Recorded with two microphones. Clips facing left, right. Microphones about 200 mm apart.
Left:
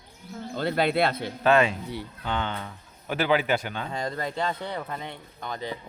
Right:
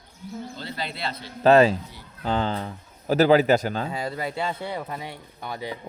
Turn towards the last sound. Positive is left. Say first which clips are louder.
# right 1 dB
turn(degrees=-10)  # may be behind; listen again after turning